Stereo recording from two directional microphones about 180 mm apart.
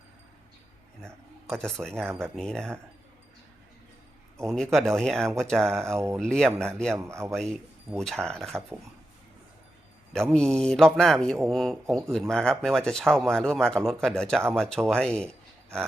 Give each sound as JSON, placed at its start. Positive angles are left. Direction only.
{"t": 1.0, "sound": "speech", "side_deg": 5}
{"t": 4.4, "sound": "speech", "side_deg": 0}
{"t": 5.9, "sound": "a man's voice", "side_deg": -15}
{"t": 6.1, "sound": "speech", "side_deg": 5}
{"t": 6.9, "sound": "a man's voice", "side_deg": -15}
{"t": 7.3, "sound": "speech", "side_deg": 0}
{"t": 10.1, "sound": "speech", "side_deg": 5}